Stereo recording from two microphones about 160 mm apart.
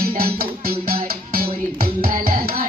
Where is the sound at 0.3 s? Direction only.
70° right (ahead or behind).